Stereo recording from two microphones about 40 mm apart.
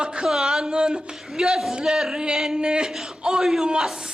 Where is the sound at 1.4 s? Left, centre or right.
Centre.